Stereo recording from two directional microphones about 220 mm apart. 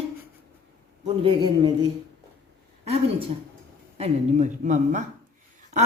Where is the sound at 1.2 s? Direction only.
20° right (ahead or behind).